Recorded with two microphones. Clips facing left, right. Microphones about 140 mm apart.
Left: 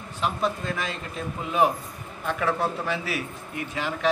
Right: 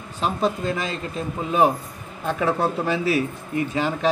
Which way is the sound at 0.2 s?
30° right (ahead or behind).